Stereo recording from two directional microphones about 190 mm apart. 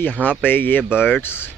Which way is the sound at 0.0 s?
10° left (ahead or behind).